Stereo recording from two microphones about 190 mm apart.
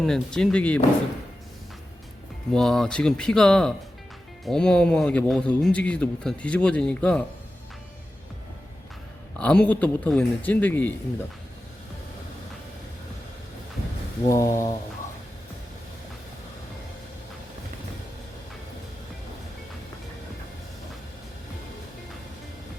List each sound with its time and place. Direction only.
0.0 s a man's voice: 5° left (ahead or behind)
2.5 s a man's voice: centre (ahead or behind)
9.4 s speech: 5° left (ahead or behind)
14.3 s speech: 15° left (ahead or behind)